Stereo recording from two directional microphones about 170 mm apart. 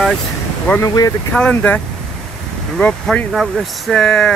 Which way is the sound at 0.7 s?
20° left (ahead or behind).